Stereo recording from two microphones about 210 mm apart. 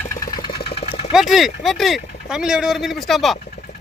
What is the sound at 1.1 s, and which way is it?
Speech, centre (ahead or behind).